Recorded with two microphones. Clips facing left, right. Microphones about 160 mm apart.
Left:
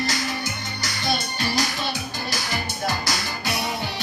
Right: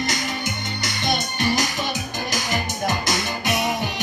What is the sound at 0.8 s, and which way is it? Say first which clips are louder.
Music: right 1 dB; 20° right (ahead or behind).